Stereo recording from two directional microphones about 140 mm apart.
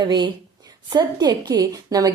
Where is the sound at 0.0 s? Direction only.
30° right (ahead or behind).